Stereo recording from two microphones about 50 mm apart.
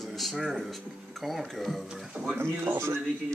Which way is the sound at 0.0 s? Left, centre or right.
Centre.